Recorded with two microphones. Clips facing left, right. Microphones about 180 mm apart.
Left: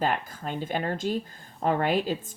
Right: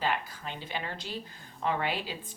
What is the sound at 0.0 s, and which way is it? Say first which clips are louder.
Speech: left 4 dB; 45° left (ahead or behind).